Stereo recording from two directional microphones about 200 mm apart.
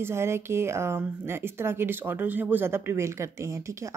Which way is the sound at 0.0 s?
10° right (ahead or behind).